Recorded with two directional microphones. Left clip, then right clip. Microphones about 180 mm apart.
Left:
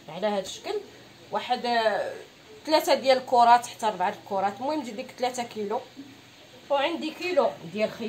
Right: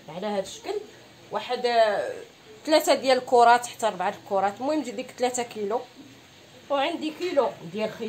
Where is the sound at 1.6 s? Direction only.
55° right (ahead or behind).